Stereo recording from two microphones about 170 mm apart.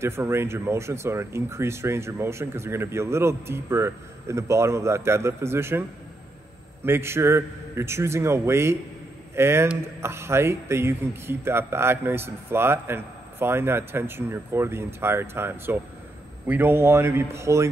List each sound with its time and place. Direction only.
0.0 s speech: 15° right (ahead or behind)